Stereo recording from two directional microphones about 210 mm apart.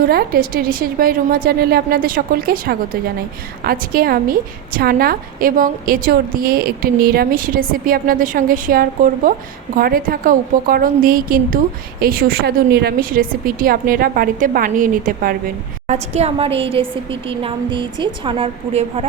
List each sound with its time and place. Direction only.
0.0 s a woman's voice: 45° right (ahead or behind)
15.9 s a woman's voice: 30° right (ahead or behind)